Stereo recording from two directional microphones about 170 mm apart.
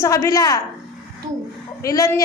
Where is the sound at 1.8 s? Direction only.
15° left (ahead or behind).